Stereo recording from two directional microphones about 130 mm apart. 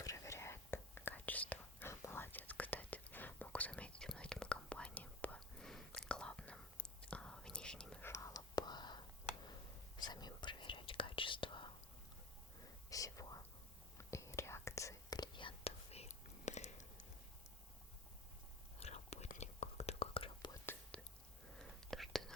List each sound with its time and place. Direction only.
0.0 s whispering: 25° left (ahead or behind); by 8.0 s 5° left (ahead or behind)
8.0 s whispering: 20° left (ahead or behind); by 11.7 s 40° left (ahead or behind)
12.9 s whispering: 25° left (ahead or behind); by 17.1 s 70° left (ahead or behind)
18.8 s whispering: 55° left (ahead or behind)
20.9 s whispering: 10° left (ahead or behind)